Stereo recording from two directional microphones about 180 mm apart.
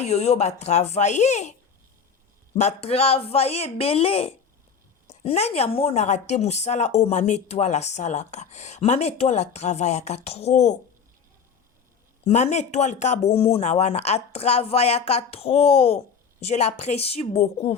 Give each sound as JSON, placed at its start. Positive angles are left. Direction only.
{"t": 0.0, "sound": "a woman's voice", "side_deg": 35}
{"t": 2.6, "sound": "a woman's voice", "side_deg": 35}
{"t": 12.2, "sound": "a woman's voice", "side_deg": 40}